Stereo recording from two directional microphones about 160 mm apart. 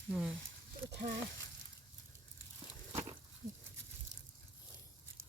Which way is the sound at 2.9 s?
35° right (ahead or behind).